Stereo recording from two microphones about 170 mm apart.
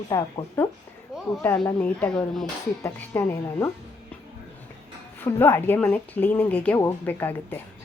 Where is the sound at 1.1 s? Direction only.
5° right (ahead or behind).